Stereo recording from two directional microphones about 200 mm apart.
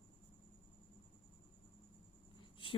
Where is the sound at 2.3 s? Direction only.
25° left (ahead or behind).